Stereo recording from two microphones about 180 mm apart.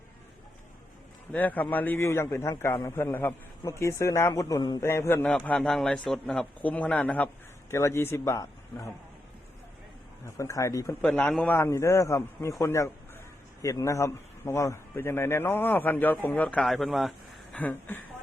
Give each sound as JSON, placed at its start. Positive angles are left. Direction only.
{"t": 1.3, "sound": "a man's voice", "side_deg": 10}
{"t": 10.2, "sound": "a man's voice", "side_deg": 15}